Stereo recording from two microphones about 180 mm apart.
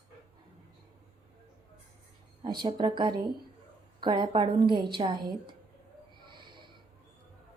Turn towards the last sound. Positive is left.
turn(degrees=-25)  # may be behind; listen again after turning